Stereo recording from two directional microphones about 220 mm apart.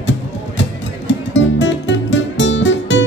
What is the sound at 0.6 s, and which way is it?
Music, 55° left (ahead or behind).